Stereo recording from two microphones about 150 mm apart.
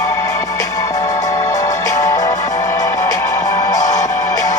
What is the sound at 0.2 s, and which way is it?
Music, 25° left (ahead or behind).